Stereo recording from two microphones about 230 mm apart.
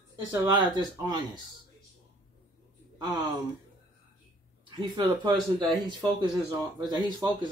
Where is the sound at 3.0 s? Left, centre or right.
Centre.